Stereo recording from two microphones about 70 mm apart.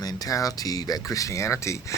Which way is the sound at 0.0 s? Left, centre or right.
Left.